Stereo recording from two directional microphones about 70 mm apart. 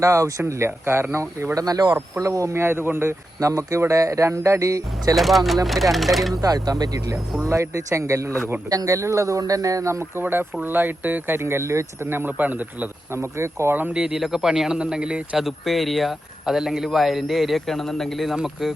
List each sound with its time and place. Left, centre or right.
0.0 s speech: right
1.5 s speech: right
2.1 s speech: right
3.4 s speech: right
5.1 s speech: centre
6.3 s speech: right
7.4 s speech: right
10.2 s speech: right
13.1 s speech: right
13.9 s a man's voice: centre
15.4 s speech: centre